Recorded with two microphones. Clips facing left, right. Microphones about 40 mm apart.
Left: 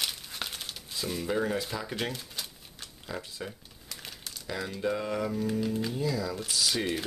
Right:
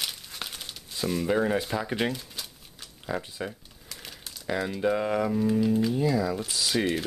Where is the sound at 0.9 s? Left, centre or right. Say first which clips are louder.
Right 5 dB; centre.